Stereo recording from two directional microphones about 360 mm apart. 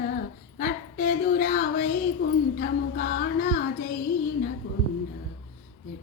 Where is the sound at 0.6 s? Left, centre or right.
Left.